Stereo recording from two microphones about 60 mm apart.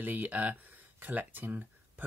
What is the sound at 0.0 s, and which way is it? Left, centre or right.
Speech, right.